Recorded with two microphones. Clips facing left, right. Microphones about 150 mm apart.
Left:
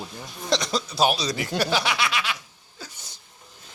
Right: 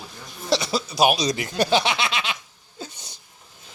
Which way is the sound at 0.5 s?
5° right (ahead or behind).